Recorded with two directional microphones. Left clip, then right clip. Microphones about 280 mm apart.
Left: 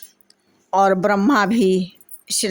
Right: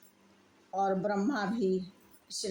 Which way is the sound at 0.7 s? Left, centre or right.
Left.